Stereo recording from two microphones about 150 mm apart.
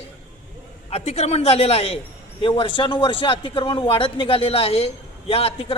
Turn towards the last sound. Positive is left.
turn(degrees=40)  # may be behind; listen again after turning